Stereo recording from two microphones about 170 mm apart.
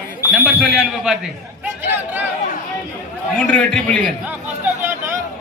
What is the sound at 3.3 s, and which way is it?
Speech, 5° left (ahead or behind).